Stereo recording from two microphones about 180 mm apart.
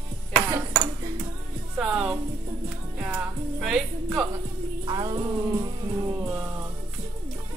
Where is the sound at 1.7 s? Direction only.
5° right (ahead or behind).